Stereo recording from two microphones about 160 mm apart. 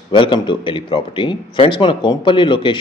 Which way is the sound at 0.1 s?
30° left (ahead or behind).